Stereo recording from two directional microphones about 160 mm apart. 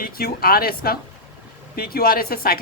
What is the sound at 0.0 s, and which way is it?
A woman's voice, 70° left (ahead or behind).